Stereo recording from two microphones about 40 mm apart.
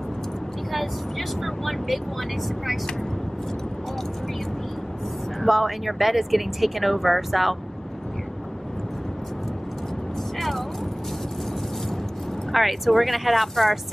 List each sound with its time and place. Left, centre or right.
0.7 s speech: centre
5.4 s speech: centre
12.5 s speech: centre